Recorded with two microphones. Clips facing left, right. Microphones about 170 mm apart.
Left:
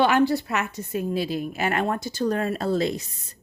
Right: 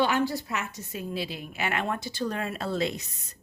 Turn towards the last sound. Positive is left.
turn(degrees=40)  # may be behind; listen again after turning